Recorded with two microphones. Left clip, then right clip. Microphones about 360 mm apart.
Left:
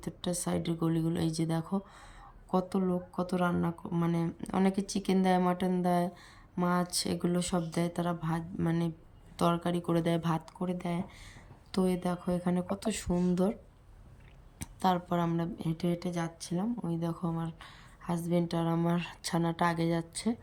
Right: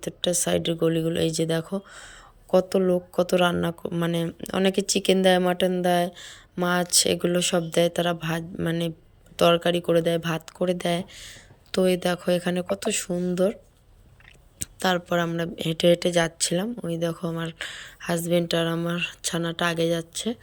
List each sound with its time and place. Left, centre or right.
0.0 s a woman's voice: centre
2.9 s speech: centre
3.5 s a woman's voice: centre
14.6 s speech: centre
15.8 s speech: centre
16.8 s a woman's voice: centre
17.4 s speech: centre
18.0 s a woman's voice: centre